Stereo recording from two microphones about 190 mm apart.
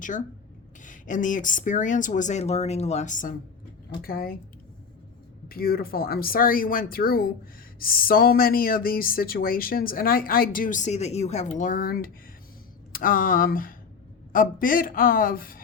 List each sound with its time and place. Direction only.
0.9 s speech: 40° left (ahead or behind)
5.5 s speech: 50° left (ahead or behind)